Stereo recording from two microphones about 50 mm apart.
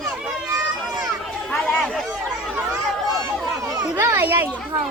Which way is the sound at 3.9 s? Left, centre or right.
Right.